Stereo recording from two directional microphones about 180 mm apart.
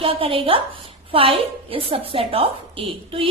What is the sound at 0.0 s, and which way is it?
A woman's voice, 30° right (ahead or behind).